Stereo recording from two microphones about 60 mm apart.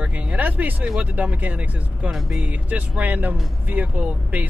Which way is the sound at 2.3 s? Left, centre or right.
Right.